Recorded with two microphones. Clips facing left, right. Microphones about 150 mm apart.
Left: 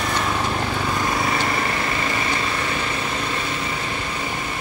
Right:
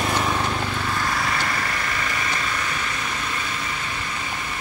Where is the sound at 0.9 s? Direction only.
20° left (ahead or behind).